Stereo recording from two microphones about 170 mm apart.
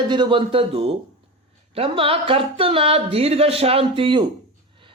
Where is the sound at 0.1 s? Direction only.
30° right (ahead or behind).